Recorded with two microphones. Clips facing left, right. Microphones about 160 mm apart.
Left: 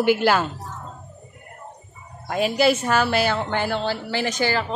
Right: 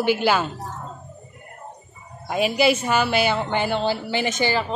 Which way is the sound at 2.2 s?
10° right (ahead or behind).